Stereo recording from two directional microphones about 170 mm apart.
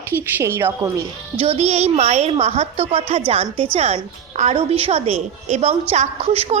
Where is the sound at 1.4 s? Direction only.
40° right (ahead or behind).